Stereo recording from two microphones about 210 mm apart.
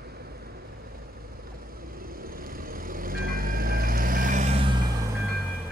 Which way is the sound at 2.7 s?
45° right (ahead or behind).